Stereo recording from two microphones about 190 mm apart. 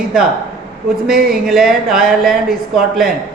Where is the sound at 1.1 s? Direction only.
50° right (ahead or behind).